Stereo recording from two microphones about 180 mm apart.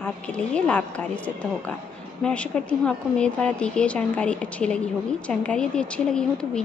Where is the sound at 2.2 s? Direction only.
5° left (ahead or behind).